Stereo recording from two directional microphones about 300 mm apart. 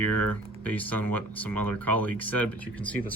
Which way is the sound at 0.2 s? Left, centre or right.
Centre.